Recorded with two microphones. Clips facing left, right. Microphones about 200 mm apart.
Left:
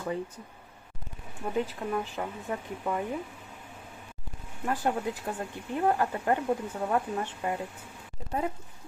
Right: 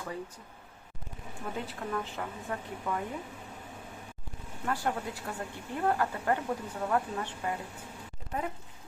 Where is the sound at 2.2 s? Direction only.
20° left (ahead or behind).